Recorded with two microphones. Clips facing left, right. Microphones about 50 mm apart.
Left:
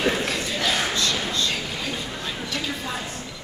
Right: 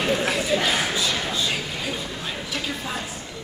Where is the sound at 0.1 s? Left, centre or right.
Centre.